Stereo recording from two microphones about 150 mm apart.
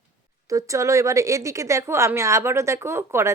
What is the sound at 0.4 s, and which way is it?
A woman's voice, 20° right (ahead or behind).